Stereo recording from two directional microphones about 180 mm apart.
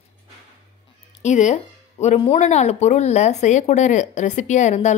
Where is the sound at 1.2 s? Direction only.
40° left (ahead or behind).